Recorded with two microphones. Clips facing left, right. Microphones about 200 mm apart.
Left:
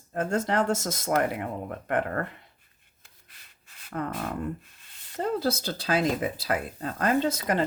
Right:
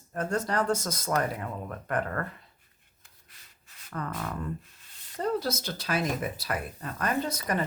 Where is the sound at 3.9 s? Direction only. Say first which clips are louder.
Left 4 dB; 30° left (ahead or behind).